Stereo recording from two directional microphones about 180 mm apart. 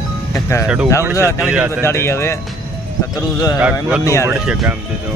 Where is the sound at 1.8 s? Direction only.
15° left (ahead or behind).